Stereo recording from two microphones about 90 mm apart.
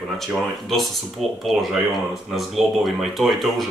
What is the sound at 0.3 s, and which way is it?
Speech, centre (ahead or behind).